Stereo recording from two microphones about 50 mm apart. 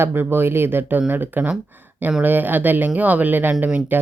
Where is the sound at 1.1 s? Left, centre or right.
Right.